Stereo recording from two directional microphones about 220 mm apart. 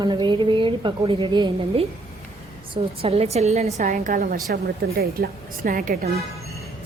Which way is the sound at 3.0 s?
25° right (ahead or behind).